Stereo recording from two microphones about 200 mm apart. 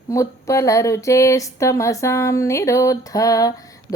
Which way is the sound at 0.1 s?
15° left (ahead or behind).